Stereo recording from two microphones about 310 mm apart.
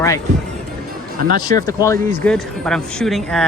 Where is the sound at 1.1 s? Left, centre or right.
Right.